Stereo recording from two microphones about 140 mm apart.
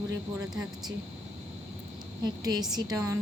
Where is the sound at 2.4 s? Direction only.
30° right (ahead or behind).